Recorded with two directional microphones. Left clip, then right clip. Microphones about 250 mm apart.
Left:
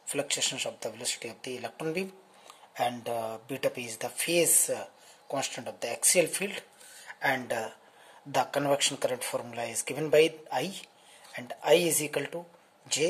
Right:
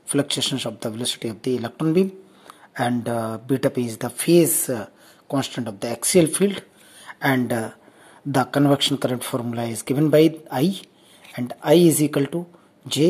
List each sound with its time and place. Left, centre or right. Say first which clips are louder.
0.1 s speech: right 8 dB; centre
8.7 s speech: right 7 dB; centre